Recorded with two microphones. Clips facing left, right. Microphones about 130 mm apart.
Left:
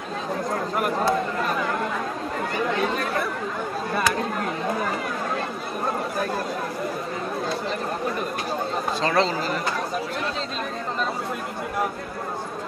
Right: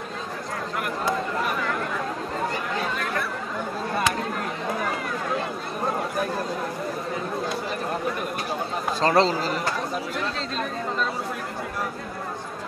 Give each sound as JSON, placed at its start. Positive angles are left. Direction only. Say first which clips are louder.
{"t": 9.0, "sound": "speech", "louder": "right 3 dB", "side_deg": -35}